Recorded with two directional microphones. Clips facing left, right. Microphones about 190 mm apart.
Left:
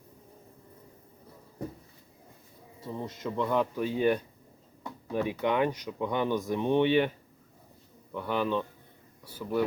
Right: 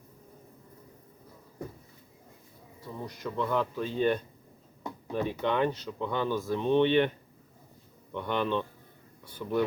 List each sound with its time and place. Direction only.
2.8 s speech: 25° left (ahead or behind)
8.1 s a man's voice: 5° left (ahead or behind)
9.2 s a sound: 5° left (ahead or behind)